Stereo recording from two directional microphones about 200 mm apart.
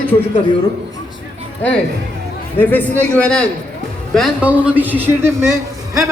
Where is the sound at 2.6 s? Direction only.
10° left (ahead or behind).